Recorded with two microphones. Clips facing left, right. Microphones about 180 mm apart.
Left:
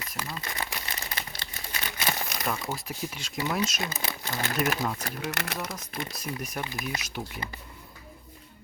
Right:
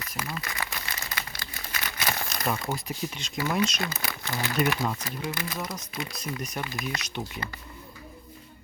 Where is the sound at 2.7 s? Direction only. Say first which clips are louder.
Right 2 dB; 5° left (ahead or behind).